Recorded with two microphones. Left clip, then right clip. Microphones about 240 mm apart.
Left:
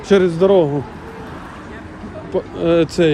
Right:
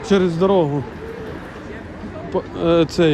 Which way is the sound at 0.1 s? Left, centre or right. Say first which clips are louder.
Left 4 dB; centre.